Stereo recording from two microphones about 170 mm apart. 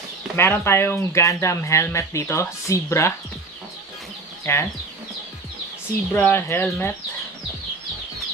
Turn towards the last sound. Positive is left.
turn(degrees=15)  # may be behind; listen again after turning